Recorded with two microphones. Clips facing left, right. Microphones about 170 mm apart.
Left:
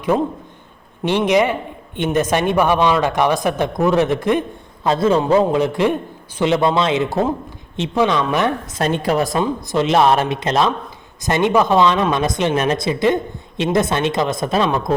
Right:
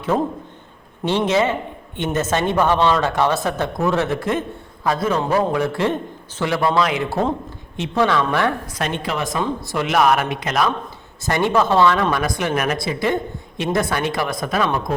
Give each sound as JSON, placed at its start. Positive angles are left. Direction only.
{"t": 0.1, "sound": "a man's voice", "side_deg": -5}
{"t": 1.0, "sound": "a man's voice", "side_deg": 15}
{"t": 8.8, "sound": "speech", "side_deg": 40}
{"t": 9.4, "sound": "a man's voice", "side_deg": 20}